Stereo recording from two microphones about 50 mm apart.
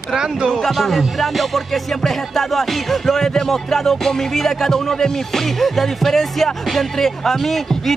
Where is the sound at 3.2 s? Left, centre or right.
Centre.